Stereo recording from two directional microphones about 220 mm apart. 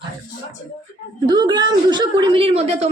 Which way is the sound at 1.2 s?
20° right (ahead or behind).